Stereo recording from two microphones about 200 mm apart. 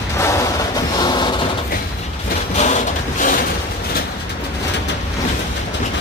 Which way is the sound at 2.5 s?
35° left (ahead or behind).